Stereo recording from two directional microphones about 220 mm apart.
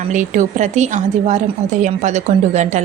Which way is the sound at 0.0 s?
35° right (ahead or behind).